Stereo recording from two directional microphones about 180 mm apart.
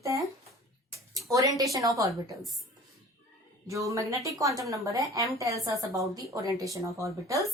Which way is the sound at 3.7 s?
15° right (ahead or behind).